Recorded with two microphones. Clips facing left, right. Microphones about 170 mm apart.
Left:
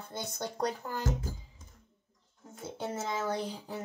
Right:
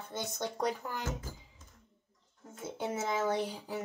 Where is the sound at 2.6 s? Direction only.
10° right (ahead or behind).